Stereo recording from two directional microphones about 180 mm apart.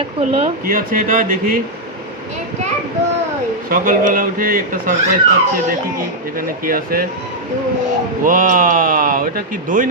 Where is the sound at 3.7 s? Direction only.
50° right (ahead or behind).